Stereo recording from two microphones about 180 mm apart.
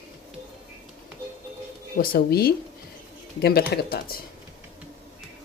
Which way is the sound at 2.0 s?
60° left (ahead or behind).